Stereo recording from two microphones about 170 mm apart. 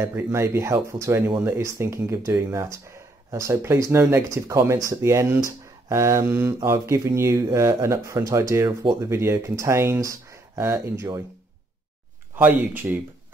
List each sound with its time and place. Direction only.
0.0 s speech: 15° right (ahead or behind)